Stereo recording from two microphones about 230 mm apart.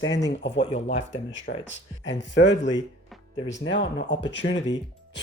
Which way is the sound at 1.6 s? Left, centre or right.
Left.